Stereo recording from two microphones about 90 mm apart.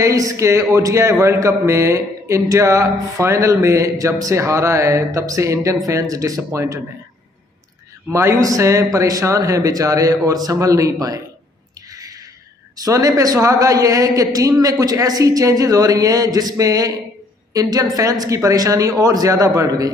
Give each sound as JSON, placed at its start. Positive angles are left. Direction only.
{"t": 0.0, "sound": "a man's voice", "side_deg": -35}
{"t": 8.1, "sound": "a man's voice", "side_deg": -35}
{"t": 12.8, "sound": "a man's voice", "side_deg": -40}